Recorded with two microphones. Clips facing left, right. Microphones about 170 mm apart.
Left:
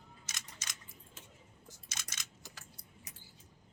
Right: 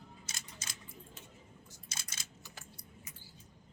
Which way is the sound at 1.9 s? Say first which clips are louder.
Left 1 dB; 30° right (ahead or behind).